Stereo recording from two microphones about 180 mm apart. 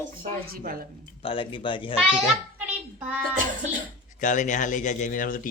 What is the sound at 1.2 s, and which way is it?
Speech, 30° left (ahead or behind).